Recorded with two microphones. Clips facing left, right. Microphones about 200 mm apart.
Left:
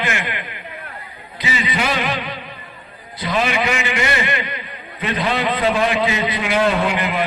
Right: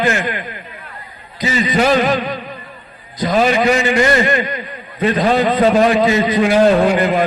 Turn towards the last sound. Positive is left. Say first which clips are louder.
# right 7 dB
turn(degrees=-40)  # may be behind; listen again after turning